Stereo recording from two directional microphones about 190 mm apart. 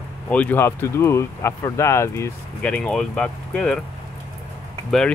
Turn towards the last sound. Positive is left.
turn(degrees=0)  # may be behind; listen again after turning